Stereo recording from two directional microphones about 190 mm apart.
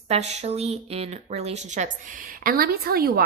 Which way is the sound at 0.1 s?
35° right (ahead or behind).